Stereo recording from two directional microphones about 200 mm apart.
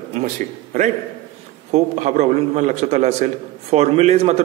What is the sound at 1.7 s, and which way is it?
A man's voice, 35° right (ahead or behind).